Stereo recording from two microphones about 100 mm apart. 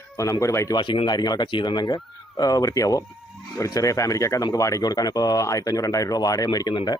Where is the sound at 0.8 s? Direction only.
55° left (ahead or behind).